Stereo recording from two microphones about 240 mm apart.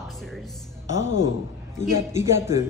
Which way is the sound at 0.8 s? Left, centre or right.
Left.